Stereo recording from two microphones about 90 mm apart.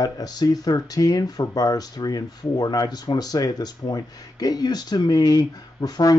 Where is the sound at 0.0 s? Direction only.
50° left (ahead or behind).